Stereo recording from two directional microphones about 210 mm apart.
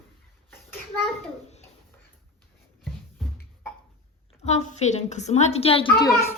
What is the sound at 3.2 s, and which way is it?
Beatboxing, centre (ahead or behind).